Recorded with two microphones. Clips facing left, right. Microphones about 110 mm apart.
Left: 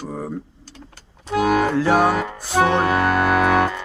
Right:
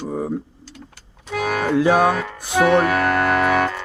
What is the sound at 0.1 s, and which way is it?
Speech, 10° right (ahead or behind).